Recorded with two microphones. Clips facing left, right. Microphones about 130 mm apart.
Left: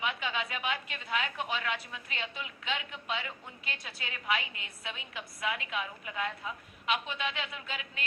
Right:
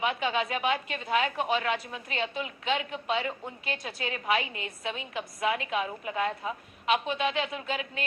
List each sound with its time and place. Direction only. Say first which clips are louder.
0.0 s a woman's voice: right 6 dB; 45° right (ahead or behind)